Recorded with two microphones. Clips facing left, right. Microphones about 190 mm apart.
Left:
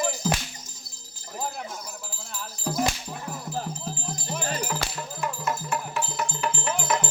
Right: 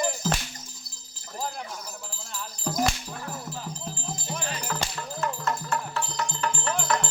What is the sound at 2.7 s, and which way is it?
Music, 5° left (ahead or behind).